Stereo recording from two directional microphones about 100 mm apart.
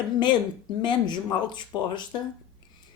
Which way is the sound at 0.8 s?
50° left (ahead or behind).